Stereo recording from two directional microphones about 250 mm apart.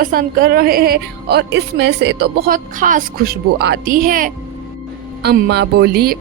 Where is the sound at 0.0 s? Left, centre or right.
Right.